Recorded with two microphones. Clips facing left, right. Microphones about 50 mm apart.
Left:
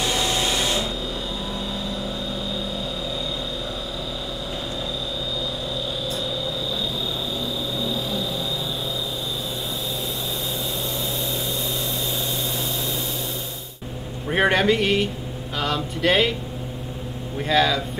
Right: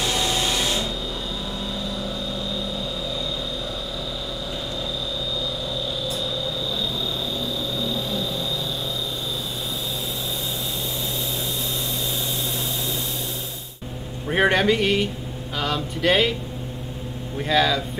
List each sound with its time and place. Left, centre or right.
0.0 s vacuum cleaner: centre
7.8 s vehicle: centre
14.3 s a man's voice: centre
17.4 s speech: centre